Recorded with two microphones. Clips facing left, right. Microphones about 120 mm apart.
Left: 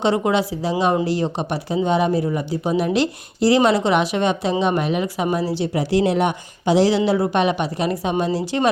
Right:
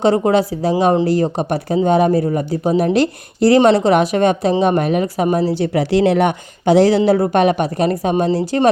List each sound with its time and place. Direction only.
0.0 s speech: 45° right (ahead or behind)
5.5 s speech: 60° right (ahead or behind); by 8.7 s 40° right (ahead or behind)